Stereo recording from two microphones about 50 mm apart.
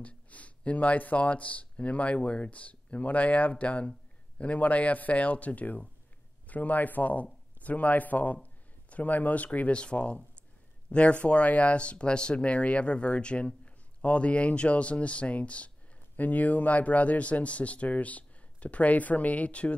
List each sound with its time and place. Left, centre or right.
0.0 s speech: left